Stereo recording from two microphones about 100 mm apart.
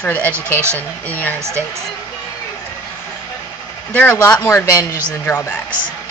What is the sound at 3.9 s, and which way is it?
Speech, 15° left (ahead or behind).